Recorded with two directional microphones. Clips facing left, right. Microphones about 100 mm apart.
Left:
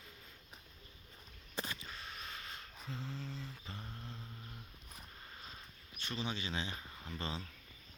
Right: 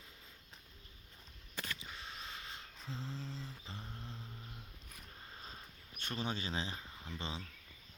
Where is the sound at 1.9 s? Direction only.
20° right (ahead or behind).